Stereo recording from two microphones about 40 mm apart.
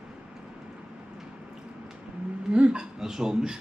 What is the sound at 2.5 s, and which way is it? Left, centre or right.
Hiccup, right.